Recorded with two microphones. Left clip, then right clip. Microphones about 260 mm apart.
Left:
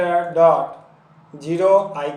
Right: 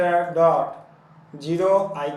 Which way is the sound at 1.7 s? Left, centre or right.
Centre.